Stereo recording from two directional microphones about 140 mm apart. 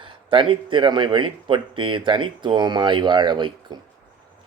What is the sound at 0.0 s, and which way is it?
Speech, 35° right (ahead or behind).